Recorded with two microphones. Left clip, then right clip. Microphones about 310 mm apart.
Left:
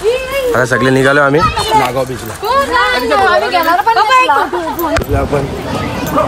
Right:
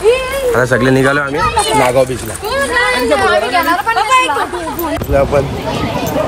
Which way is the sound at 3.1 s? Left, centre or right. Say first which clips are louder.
Left 1 dB; left.